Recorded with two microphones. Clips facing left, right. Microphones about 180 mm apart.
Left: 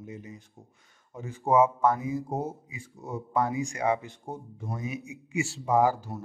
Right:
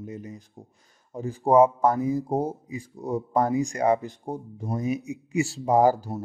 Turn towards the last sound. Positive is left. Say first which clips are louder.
# right 4 dB
turn(degrees=-40)  # may be behind; listen again after turning